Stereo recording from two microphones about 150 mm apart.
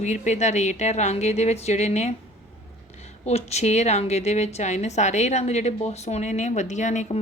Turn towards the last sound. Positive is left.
turn(degrees=55)  # may be behind; listen again after turning